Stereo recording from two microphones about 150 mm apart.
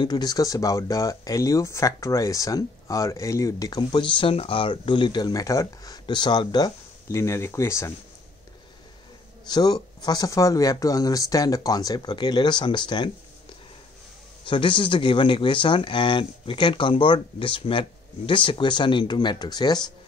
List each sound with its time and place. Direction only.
0.0 s speech: 25° left (ahead or behind)
9.5 s speech: 25° left (ahead or behind)
14.4 s speech: 35° left (ahead or behind)